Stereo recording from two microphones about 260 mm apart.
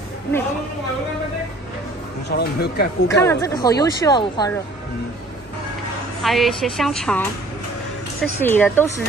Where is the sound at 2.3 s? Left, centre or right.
Left.